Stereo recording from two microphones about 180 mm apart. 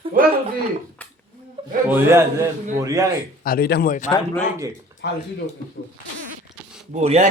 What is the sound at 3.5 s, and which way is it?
Speech, 60° left (ahead or behind).